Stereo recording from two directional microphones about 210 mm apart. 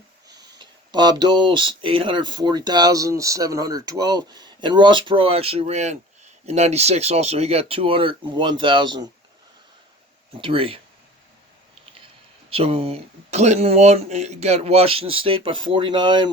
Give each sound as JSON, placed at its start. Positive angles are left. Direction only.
{"t": 0.6, "sound": "speech", "side_deg": -20}
{"t": 10.3, "sound": "speech", "side_deg": -25}
{"t": 12.5, "sound": "speech", "side_deg": -25}